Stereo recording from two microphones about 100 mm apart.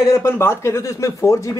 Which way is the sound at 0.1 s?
25° left (ahead or behind).